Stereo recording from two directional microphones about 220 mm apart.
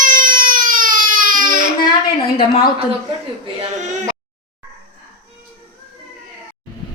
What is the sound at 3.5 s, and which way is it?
Speech, 30° right (ahead or behind).